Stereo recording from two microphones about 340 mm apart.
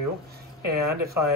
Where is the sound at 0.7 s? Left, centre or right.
Right.